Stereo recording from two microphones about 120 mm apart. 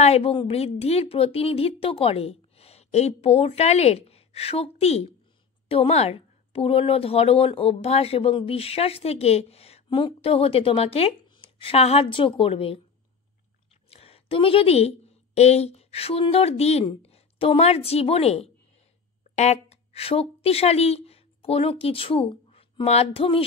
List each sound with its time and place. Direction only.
0.0 s a woman's voice: 55° left (ahead or behind)
13.8 s a woman's voice: 55° left (ahead or behind)
19.3 s speech: 65° left (ahead or behind); by 23.4 s 50° left (ahead or behind)